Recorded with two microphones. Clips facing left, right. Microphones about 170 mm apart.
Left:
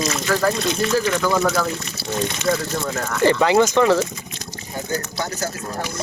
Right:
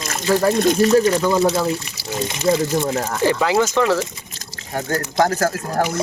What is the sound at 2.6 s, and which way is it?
Speech, 25° right (ahead or behind).